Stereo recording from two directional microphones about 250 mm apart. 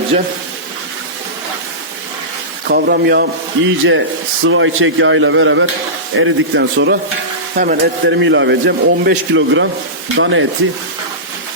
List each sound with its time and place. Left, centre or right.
2.6 s a man's voice: right